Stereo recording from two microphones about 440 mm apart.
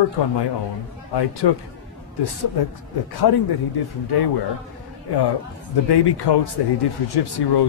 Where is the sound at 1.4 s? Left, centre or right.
Left.